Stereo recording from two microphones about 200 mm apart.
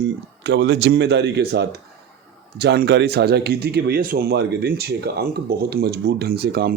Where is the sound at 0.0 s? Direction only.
60° right (ahead or behind).